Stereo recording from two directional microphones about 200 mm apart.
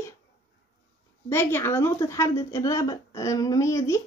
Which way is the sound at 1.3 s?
10° left (ahead or behind).